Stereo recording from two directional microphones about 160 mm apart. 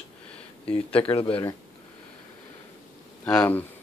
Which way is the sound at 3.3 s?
10° left (ahead or behind).